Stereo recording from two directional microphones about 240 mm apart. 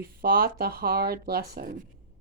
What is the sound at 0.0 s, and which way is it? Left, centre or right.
Speech, right.